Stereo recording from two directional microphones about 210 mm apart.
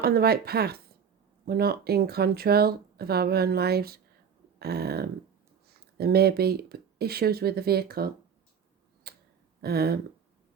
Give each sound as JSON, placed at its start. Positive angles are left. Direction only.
{"t": 0.0, "sound": "speech", "side_deg": -45}
{"t": 9.1, "sound": "tick-tock", "side_deg": -50}
{"t": 9.6, "sound": "speech", "side_deg": -50}